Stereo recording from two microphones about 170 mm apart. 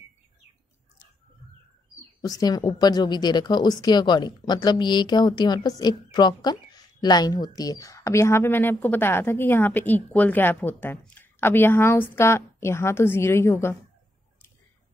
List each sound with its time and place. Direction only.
2.2 s a woman's voice: 20° left (ahead or behind)